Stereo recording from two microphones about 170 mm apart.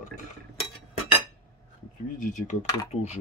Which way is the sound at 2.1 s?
45° left (ahead or behind).